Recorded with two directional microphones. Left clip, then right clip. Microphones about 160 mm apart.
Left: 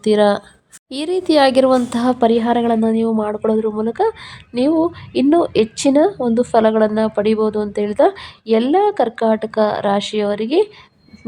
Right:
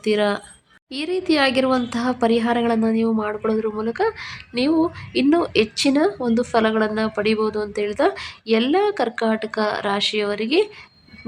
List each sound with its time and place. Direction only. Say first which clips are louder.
0.0 s speech: left 6 dB; 30° left (ahead or behind)